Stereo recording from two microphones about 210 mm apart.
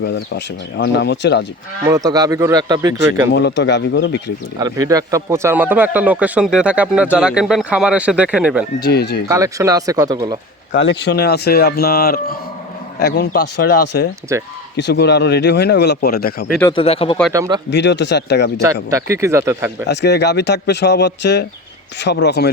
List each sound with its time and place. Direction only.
0.0 s speech: 55° left (ahead or behind)
1.9 s speech: 15° right (ahead or behind)
3.3 s speech: 55° left (ahead or behind)
4.6 s speech: 15° right (ahead or behind)
8.8 s speech: 50° left (ahead or behind)
9.3 s speech: 15° right (ahead or behind)
10.7 s speech: 60° left (ahead or behind)
16.6 s speech: 25° left (ahead or behind)
17.3 s speech: 15° right (ahead or behind)
17.7 s speech: 55° left (ahead or behind)
18.6 s speech: 15° right (ahead or behind)
19.9 s speech: 55° left (ahead or behind)